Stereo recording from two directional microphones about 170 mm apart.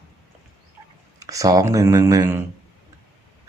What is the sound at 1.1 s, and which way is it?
Speech, 20° right (ahead or behind).